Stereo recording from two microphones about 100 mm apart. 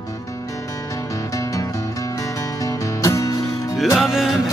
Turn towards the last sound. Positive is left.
turn(degrees=0)  # may be behind; listen again after turning